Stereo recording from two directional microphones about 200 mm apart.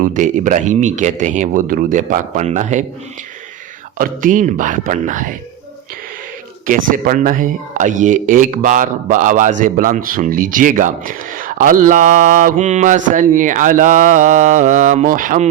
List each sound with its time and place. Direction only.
0.0 s speech: 40° right (ahead or behind)
3.9 s speech: 45° right (ahead or behind)
6.7 s speech: 45° right (ahead or behind)